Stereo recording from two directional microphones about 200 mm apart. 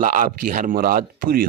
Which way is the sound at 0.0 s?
40° right (ahead or behind).